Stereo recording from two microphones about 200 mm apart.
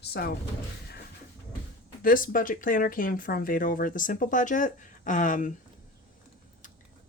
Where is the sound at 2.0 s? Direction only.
45° left (ahead or behind).